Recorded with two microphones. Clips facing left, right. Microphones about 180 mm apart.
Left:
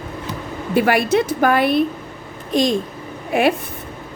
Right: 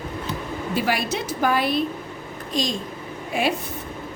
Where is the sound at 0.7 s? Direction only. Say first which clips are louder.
Left 9 dB; 60° left (ahead or behind).